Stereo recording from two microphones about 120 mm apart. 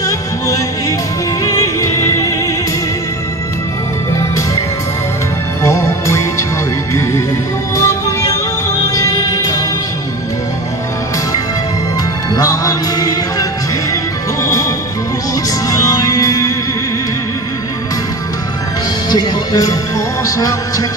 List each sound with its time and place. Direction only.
0.0 s music: 25° left (ahead or behind)
5.6 s music: 25° left (ahead or behind)
12.4 s music: 30° left (ahead or behind)
15.7 s music: 30° left (ahead or behind)
19.0 s music: 35° left (ahead or behind)